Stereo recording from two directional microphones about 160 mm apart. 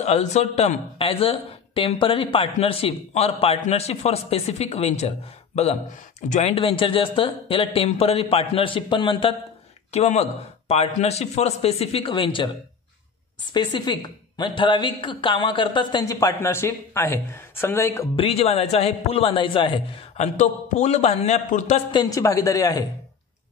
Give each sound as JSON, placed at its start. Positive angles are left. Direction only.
{"t": 0.0, "sound": "speech", "side_deg": 45}
{"t": 6.2, "sound": "a man's voice", "side_deg": 50}
{"t": 6.6, "sound": "speech", "side_deg": 35}
{"t": 9.8, "sound": "speech", "side_deg": 40}
{"t": 13.5, "sound": "a woman's voice", "side_deg": 30}
{"t": 18.1, "sound": "speech", "side_deg": 40}
{"t": 20.2, "sound": "a man's voice", "side_deg": 50}
{"t": 21.9, "sound": "a woman's voice", "side_deg": 20}